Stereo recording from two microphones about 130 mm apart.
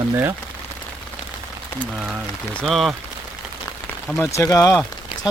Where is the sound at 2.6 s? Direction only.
Centre (ahead or behind).